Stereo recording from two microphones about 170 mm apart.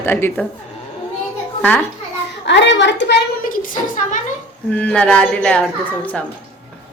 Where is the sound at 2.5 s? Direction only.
90° left.